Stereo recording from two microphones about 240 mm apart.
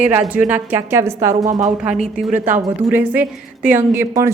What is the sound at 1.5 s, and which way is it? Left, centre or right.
Speech, right.